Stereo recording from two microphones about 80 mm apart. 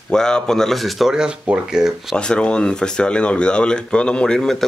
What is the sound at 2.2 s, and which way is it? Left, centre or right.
Speech, centre.